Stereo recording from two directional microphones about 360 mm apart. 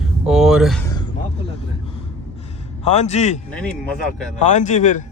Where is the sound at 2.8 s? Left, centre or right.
Centre.